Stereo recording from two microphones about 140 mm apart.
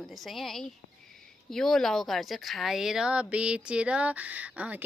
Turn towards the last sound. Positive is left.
turn(degrees=-10)  # may be behind; listen again after turning